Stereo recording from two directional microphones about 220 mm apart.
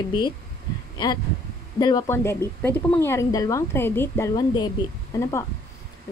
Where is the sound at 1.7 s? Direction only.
20° left (ahead or behind).